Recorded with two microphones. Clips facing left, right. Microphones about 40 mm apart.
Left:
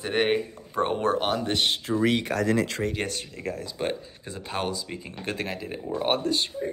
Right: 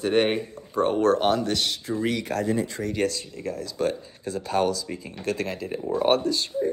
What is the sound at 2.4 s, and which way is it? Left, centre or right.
Speech, left.